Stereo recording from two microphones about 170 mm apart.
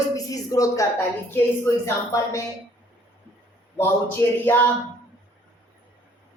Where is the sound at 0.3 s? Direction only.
20° left (ahead or behind).